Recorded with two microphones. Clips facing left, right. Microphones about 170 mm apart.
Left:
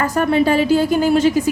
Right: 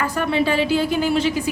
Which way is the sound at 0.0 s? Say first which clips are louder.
Left 5 dB; 45° left (ahead or behind).